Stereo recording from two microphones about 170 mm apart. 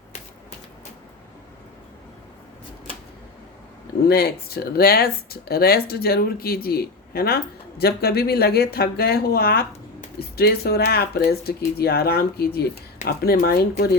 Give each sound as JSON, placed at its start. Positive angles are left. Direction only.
{"t": 4.1, "sound": "speech", "side_deg": 65}